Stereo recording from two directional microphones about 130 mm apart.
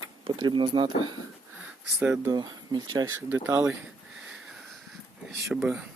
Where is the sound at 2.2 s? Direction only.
35° right (ahead or behind).